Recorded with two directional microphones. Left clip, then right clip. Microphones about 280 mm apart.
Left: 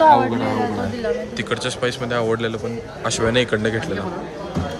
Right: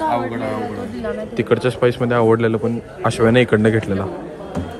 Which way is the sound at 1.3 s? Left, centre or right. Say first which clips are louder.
Right 6 dB; centre.